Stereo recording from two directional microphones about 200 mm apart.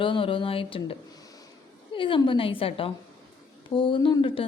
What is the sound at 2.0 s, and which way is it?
A woman's voice, 25° left (ahead or behind).